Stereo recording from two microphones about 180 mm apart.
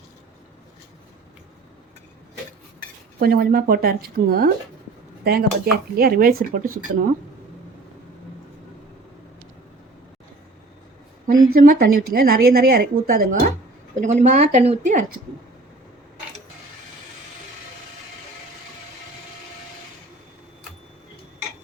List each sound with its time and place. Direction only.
3.2 s a woman's voice: 60° right (ahead or behind)
11.3 s a woman's voice: 50° right (ahead or behind)
13.9 s speech: 40° right (ahead or behind)